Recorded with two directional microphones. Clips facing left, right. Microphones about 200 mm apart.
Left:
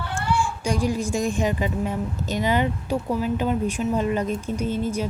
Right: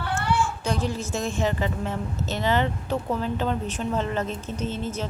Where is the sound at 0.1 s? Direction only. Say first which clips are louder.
Even; 15° left (ahead or behind).